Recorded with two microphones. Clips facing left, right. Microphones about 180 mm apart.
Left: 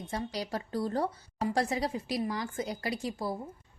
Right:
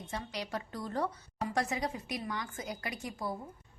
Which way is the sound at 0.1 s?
35° left (ahead or behind).